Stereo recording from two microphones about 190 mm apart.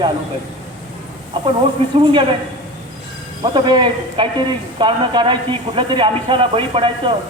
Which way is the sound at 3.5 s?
25° right (ahead or behind).